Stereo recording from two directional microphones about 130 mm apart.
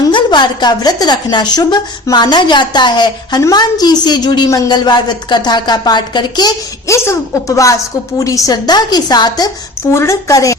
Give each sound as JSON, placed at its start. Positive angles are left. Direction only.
{"t": 0.1, "sound": "a woman's voice", "side_deg": 35}
{"t": 9.9, "sound": "a woman's voice", "side_deg": 20}